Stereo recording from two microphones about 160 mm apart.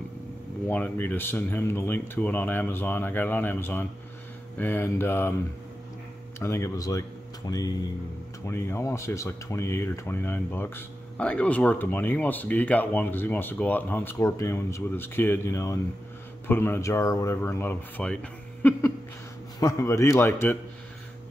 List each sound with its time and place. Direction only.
0.7 s speech: 10° left (ahead or behind)
6.4 s speech: 15° left (ahead or behind)